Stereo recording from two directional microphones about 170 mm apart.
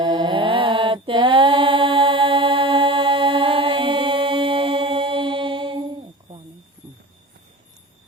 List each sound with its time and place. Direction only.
0.0 s mantra: 25° right (ahead or behind)